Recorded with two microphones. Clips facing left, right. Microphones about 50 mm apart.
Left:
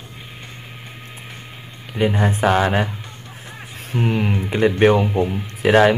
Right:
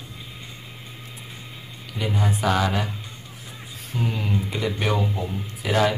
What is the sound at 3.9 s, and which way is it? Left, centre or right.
Speech, left.